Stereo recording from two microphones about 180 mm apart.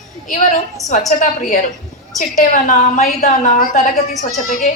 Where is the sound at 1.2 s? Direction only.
45° left (ahead or behind).